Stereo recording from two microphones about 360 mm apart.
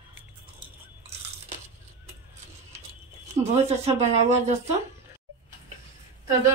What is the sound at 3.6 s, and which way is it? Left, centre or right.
Speech, centre.